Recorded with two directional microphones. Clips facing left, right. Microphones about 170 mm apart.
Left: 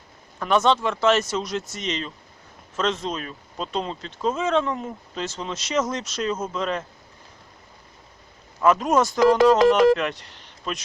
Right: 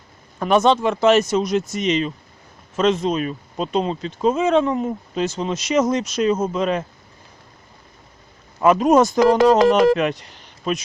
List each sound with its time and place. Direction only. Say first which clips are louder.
0.3 s speech: right 4 dB; 15° right (ahead or behind)
8.6 s speech: right 5 dB; 15° right (ahead or behind)
9.5 s speech: right 2 dB; 35° right (ahead or behind)
9.8 s speech: right 2 dB; 15° right (ahead or behind)